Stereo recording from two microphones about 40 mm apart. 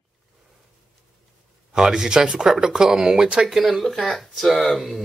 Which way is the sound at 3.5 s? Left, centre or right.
Centre.